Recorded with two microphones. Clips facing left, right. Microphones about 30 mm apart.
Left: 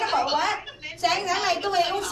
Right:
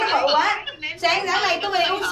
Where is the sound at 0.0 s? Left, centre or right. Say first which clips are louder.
Right 5 dB; right.